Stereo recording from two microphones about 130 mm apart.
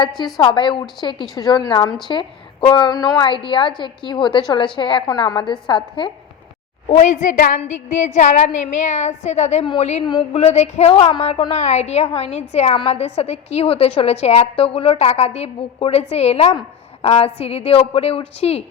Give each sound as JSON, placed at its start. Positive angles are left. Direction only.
{"t": 0.3, "sound": "a woman's voice", "side_deg": 40}
{"t": 6.8, "sound": "a woman's voice", "side_deg": 65}
{"t": 7.6, "sound": "a woman's voice", "side_deg": 65}
{"t": 10.0, "sound": "a woman's voice", "side_deg": 35}
{"t": 10.3, "sound": "a woman's voice", "side_deg": 55}